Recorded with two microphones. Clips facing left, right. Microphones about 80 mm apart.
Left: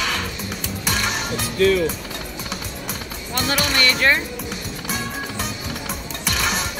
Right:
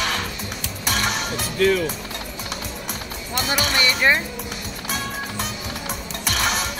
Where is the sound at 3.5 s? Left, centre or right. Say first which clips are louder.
Left 1 dB; centre.